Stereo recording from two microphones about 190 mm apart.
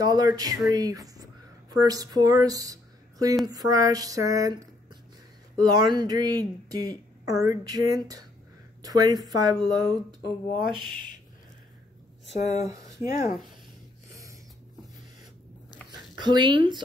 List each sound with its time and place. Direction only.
0.0 s speech: 20° right (ahead or behind)
3.4 s a sound: 20° right (ahead or behind)
5.6 s speech: 20° right (ahead or behind)
12.3 s speech: 35° left (ahead or behind)
16.2 s speech: 25° right (ahead or behind)